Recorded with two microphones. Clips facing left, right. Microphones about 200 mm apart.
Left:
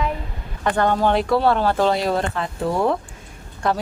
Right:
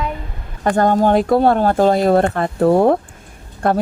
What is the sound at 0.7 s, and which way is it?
Speech, 45° right (ahead or behind).